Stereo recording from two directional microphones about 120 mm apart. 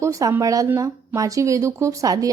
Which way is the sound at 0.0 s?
25° right (ahead or behind).